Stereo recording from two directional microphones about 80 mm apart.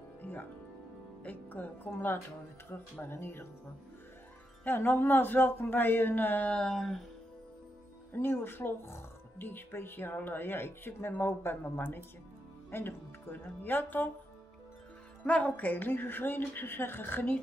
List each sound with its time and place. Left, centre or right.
0.2 s music: left
1.2 s speech: left
4.6 s speech: left; by 7.1 s centre
8.1 s speech: left
15.2 s speech: centre